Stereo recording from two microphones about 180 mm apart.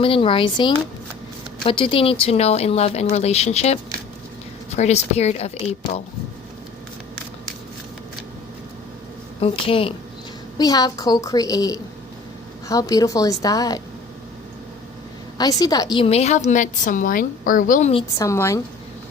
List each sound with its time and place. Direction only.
0.0 s a woman's voice: 30° left (ahead or behind)
4.8 s speech: 35° left (ahead or behind)
9.4 s a woman's voice: 30° left (ahead or behind)
15.4 s a woman's voice: 20° left (ahead or behind)
16.0 s a woman's voice: 35° left (ahead or behind)
18.2 s a woman's voice: 15° left (ahead or behind)